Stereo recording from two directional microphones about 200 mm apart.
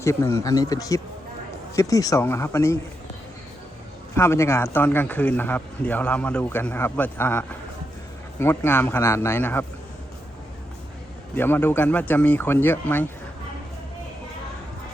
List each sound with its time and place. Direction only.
0.0 s speech: 15° left (ahead or behind)
4.1 s speech: 15° left (ahead or behind)
11.3 s speech: 10° left (ahead or behind)